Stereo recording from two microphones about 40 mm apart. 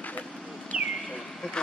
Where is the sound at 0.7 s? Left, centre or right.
Right.